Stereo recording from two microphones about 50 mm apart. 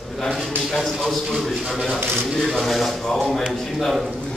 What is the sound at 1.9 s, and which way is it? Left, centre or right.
Speech, right.